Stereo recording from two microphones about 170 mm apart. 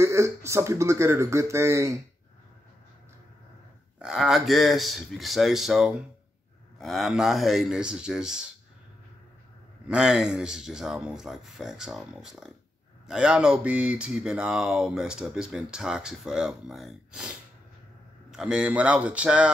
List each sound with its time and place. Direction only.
0.0 s speech: 15° right (ahead or behind)
4.0 s speech: centre (ahead or behind)
9.8 s speech: 5° right (ahead or behind)